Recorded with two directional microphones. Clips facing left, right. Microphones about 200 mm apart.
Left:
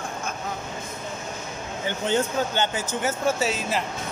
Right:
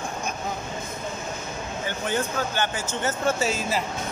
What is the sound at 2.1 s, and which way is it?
Speech, 20° left (ahead or behind).